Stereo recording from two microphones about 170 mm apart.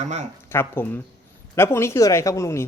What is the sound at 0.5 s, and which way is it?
Speech, 15° left (ahead or behind).